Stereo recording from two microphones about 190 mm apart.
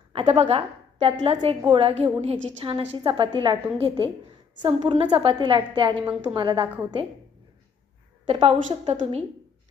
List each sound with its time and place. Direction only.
0.1 s a woman's voice: 30° right (ahead or behind)
8.3 s a woman's voice: 30° right (ahead or behind)